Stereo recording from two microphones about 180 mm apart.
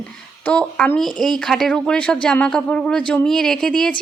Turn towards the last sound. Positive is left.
turn(degrees=5)  # may be behind; listen again after turning